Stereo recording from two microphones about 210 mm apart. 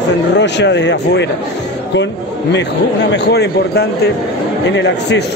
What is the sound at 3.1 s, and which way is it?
Speech, 50° left (ahead or behind).